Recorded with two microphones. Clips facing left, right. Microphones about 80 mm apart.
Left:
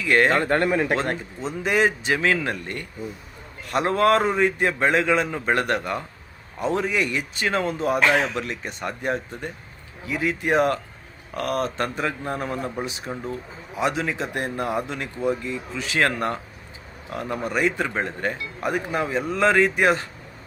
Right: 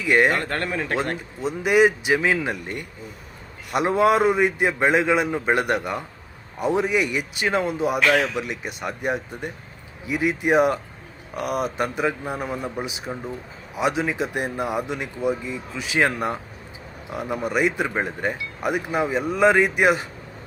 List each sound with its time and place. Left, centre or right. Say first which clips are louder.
0.0 s speech: even; centre
0.3 s speech: left 5 dB; centre
1.4 s speech: right 4 dB; centre
7.9 s speech: even; left
8.4 s speech: right 1 dB; centre